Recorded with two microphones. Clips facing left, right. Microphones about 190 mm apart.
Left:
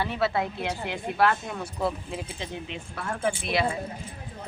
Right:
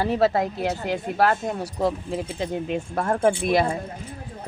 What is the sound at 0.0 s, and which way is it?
Speech, 40° right (ahead or behind).